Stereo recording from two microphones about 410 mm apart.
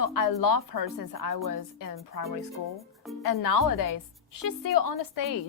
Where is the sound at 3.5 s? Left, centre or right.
Left.